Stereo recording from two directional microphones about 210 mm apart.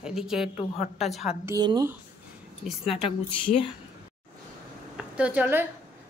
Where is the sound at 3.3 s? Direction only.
25° left (ahead or behind).